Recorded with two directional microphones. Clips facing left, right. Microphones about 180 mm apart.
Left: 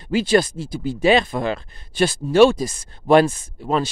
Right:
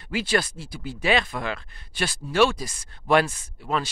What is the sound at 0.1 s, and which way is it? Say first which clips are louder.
Speech: left 8 dB; 20° left (ahead or behind).